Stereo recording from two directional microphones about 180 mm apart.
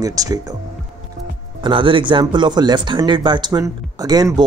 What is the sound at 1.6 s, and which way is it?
Speech, 30° right (ahead or behind).